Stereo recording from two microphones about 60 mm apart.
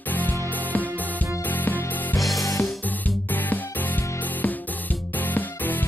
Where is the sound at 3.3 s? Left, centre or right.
Left.